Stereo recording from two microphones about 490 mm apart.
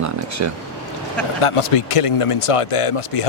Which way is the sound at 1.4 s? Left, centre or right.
Left.